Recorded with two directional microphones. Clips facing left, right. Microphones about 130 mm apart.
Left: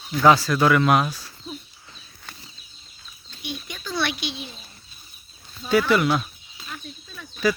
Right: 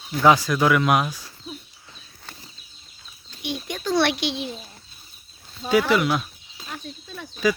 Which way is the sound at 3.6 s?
80° right.